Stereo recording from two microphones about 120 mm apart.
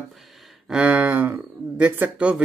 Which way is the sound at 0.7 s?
15° right (ahead or behind).